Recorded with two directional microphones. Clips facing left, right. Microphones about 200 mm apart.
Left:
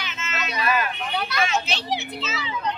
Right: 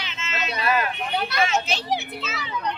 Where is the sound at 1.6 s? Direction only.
50° right (ahead or behind).